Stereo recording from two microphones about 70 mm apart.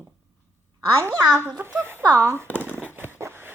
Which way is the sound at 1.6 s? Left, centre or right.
Right.